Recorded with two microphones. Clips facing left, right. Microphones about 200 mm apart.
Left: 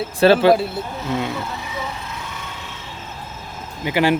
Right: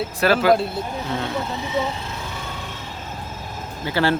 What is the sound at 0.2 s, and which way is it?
Speech, 30° left (ahead or behind).